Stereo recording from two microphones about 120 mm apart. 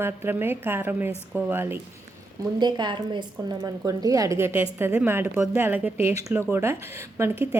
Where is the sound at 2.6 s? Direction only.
40° right (ahead or behind).